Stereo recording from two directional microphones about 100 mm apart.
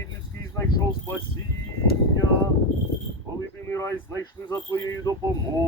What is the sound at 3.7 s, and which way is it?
Speech, 30° left (ahead or behind).